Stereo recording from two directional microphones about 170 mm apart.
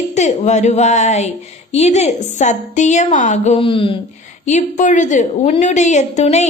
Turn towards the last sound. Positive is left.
turn(degrees=40)  # may be behind; listen again after turning